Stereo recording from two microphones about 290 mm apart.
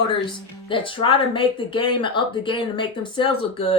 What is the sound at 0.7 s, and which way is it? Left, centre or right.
Speech, centre.